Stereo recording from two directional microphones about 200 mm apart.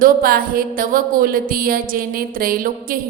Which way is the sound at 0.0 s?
45° right (ahead or behind).